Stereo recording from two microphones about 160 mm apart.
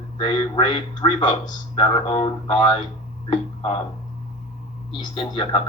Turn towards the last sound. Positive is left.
turn(degrees=35)  # may be behind; listen again after turning